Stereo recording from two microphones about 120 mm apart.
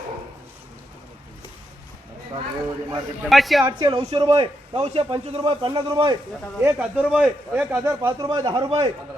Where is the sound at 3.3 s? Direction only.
Centre (ahead or behind).